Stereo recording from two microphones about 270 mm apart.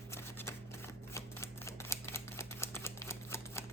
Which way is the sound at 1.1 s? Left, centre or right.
Centre.